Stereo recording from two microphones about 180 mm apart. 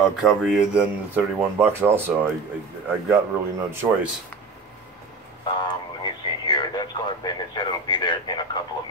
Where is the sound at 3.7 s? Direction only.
15° right (ahead or behind).